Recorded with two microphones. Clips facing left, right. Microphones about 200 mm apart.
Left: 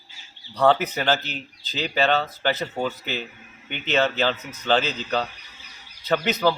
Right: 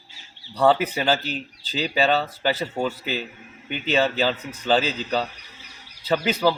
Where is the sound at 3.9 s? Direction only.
5° right (ahead or behind).